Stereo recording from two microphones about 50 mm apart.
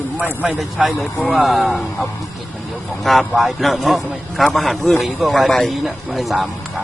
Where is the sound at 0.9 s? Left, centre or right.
Left.